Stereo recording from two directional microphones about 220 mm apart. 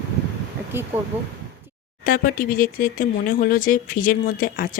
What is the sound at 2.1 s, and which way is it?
Speech, 40° left (ahead or behind).